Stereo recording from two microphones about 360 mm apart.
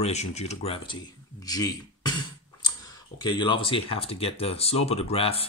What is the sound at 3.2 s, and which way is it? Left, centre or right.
Speech, centre.